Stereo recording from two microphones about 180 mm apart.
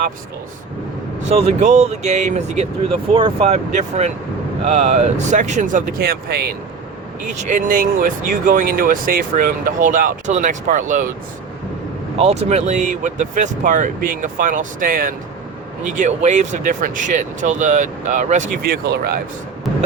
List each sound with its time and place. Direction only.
1.3 s speech: 35° right (ahead or behind); by 6.5 s 60° right (ahead or behind)
7.4 s speech: 45° right (ahead or behind)
12.1 s speech: 35° right (ahead or behind); by 19.2 s 60° right (ahead or behind)